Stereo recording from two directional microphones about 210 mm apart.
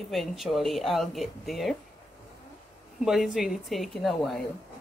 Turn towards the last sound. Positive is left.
turn(degrees=0)  # may be behind; listen again after turning